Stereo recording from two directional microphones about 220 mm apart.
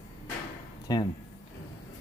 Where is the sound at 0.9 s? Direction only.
20° left (ahead or behind).